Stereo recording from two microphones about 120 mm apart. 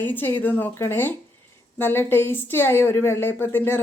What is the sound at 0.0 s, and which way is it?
A woman's voice, 15° left (ahead or behind).